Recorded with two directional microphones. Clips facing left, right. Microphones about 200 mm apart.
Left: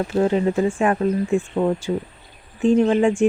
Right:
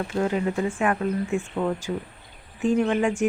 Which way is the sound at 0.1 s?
30° left (ahead or behind).